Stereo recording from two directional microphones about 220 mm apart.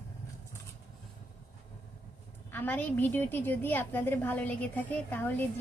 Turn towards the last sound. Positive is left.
turn(degrees=10)  # may be behind; listen again after turning